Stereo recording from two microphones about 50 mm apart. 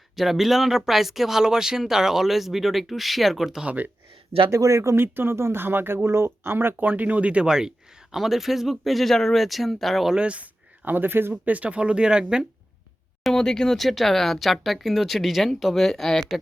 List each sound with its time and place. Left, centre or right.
0.2 s speech: centre
4.4 s speech: right
4.9 s speech: right; by 10.2 s centre
10.2 s speech: right
10.8 s speech: right
11.4 s speech: right
13.2 s speech: centre